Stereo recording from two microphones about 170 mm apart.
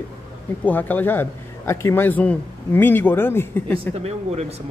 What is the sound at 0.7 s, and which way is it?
A man's voice, 10° left (ahead or behind).